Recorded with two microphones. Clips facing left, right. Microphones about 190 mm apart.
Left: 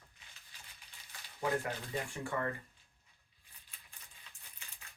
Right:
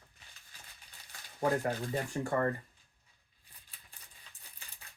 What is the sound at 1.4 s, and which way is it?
Speech, 40° right (ahead or behind).